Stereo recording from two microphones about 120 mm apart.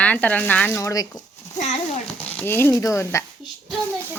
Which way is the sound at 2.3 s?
15° left (ahead or behind).